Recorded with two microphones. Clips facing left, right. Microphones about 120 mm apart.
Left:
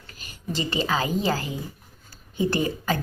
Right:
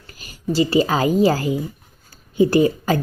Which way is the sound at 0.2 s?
40° right (ahead or behind).